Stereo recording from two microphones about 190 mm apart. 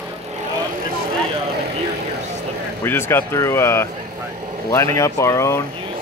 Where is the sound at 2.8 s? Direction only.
10° left (ahead or behind).